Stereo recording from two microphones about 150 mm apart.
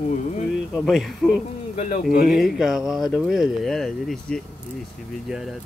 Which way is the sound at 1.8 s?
60° left (ahead or behind).